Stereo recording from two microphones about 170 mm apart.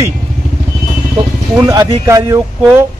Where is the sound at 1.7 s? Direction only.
20° right (ahead or behind).